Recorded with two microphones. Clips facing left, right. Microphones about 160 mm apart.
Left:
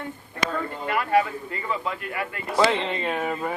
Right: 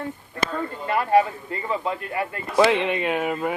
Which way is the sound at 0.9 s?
30° right (ahead or behind).